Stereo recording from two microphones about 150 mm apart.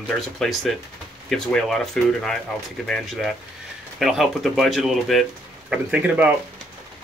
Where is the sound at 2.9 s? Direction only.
Centre (ahead or behind).